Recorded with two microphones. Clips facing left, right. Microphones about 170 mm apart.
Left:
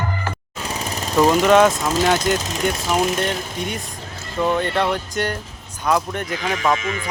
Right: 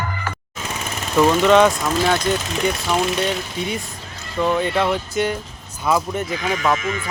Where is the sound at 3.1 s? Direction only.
Centre (ahead or behind).